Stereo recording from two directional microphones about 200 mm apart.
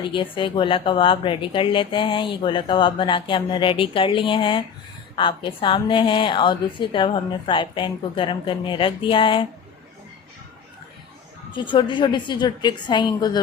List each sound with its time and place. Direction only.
0.0 s a woman's voice: 25° left (ahead or behind)
11.5 s a woman's voice: 25° left (ahead or behind)